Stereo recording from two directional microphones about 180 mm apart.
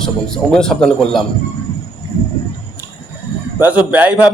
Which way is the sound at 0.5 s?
5° left (ahead or behind).